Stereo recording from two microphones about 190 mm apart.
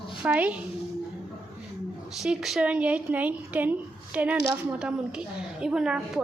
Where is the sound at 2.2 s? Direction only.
Centre (ahead or behind).